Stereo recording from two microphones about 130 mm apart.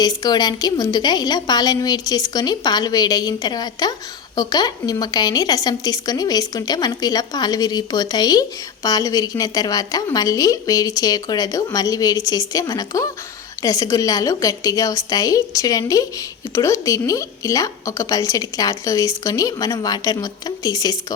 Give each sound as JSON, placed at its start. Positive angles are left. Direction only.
{"t": 0.0, "sound": "a woman's voice", "side_deg": 30}